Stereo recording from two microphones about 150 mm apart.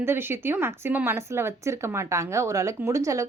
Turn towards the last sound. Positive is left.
turn(degrees=-20)  # may be behind; listen again after turning